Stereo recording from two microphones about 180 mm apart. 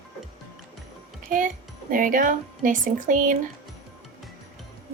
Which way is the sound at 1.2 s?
45° right (ahead or behind).